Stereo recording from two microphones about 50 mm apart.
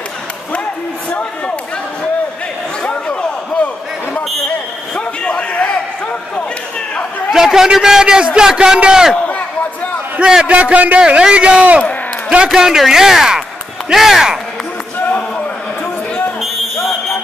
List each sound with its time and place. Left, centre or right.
2.8 s a sound: left
7.3 s a man's voice: centre
10.4 s a man's voice: right
11.0 s a man's voice: centre
12.5 s speech: centre
15.0 s a sound: left